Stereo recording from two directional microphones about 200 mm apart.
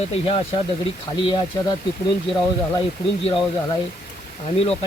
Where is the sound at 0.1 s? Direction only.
30° left (ahead or behind).